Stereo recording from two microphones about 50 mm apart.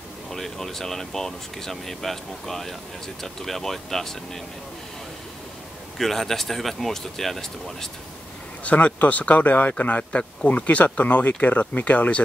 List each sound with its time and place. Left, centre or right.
0.3 s speech: centre
5.9 s speech: centre
8.6 s speech: left